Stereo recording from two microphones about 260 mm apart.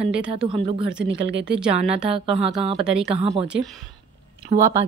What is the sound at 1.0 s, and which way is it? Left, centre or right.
Speech, right.